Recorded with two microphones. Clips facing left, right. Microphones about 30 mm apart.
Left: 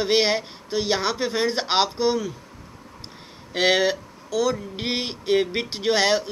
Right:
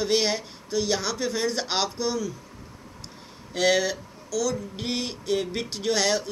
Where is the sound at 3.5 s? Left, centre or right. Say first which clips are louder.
Left 3 dB; left.